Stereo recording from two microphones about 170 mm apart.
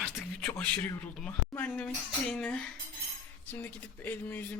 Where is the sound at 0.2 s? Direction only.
10° left (ahead or behind).